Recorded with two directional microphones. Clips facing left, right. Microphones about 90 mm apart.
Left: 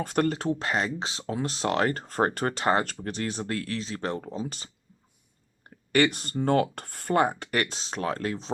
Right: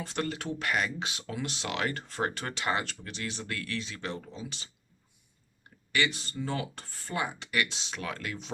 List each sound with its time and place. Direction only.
0.0 s speech: 45° left (ahead or behind)
0.3 s speech: 30° left (ahead or behind)